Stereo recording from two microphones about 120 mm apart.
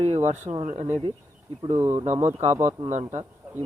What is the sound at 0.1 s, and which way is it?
Speech, 75° right (ahead or behind).